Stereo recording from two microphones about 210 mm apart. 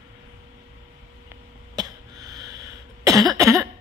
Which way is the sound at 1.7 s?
20° right (ahead or behind).